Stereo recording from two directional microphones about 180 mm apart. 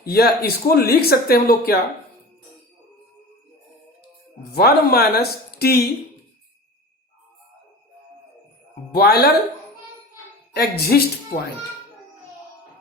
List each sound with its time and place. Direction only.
0.0 s speech: 60° left (ahead or behind)
4.5 s speech: 60° left (ahead or behind)
8.9 s speech: 60° left (ahead or behind)
10.5 s speech: 60° left (ahead or behind)